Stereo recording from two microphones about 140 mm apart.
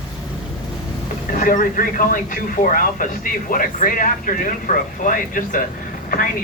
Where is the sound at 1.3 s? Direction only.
70° left (ahead or behind).